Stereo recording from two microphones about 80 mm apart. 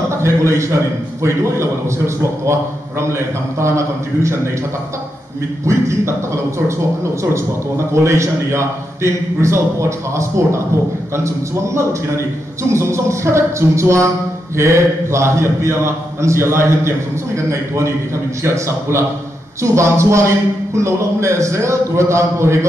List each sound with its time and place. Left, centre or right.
0.1 s a man's voice: right
5.7 s a man's voice: right
7.9 s a man's voice: right